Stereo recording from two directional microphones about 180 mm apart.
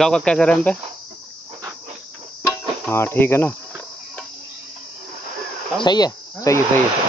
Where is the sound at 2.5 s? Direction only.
10° left (ahead or behind).